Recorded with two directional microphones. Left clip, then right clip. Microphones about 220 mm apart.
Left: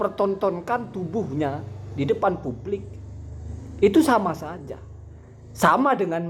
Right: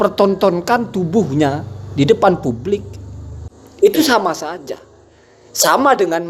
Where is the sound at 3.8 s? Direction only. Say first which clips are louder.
Right 6 dB; 30° right (ahead or behind).